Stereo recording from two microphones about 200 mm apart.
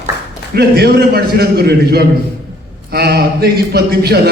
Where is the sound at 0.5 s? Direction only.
55° right (ahead or behind).